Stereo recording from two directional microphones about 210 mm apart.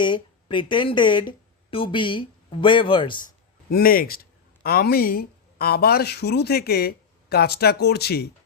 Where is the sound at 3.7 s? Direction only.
45° left (ahead or behind).